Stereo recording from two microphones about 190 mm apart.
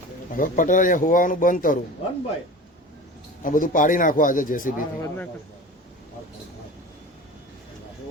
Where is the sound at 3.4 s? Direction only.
45° left (ahead or behind).